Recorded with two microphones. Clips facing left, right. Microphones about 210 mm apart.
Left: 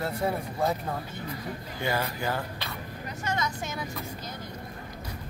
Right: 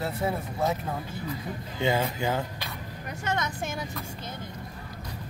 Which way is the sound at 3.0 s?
60° right (ahead or behind).